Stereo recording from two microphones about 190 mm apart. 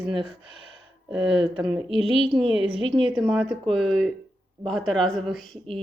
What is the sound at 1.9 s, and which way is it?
Speech, 25° right (ahead or behind).